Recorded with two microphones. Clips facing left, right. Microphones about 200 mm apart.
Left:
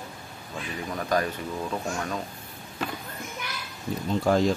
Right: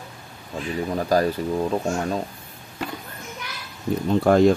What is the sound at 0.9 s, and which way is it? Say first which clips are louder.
Speech: right 6 dB; 35° right (ahead or behind).